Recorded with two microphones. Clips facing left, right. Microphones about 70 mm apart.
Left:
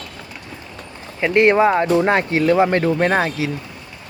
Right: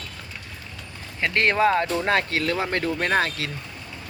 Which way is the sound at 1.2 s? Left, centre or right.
Centre.